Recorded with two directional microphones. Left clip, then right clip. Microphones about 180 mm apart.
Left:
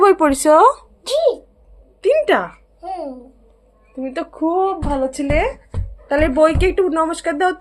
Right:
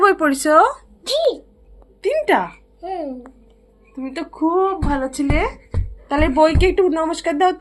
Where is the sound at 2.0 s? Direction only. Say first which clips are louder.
Left 2 dB; 35° left (ahead or behind).